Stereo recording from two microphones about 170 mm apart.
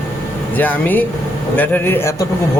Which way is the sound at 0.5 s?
10° left (ahead or behind).